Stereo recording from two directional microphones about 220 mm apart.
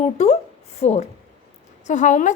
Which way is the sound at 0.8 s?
30° left (ahead or behind).